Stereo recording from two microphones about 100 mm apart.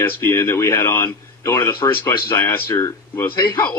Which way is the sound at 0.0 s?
25° left (ahead or behind).